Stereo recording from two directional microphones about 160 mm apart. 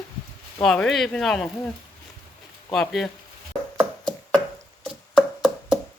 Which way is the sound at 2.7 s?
Centre (ahead or behind).